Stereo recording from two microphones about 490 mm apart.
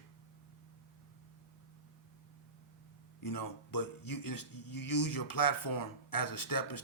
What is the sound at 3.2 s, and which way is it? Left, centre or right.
Speech, left.